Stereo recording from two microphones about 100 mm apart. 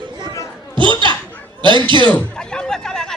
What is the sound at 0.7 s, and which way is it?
Chatter, 55° right (ahead or behind).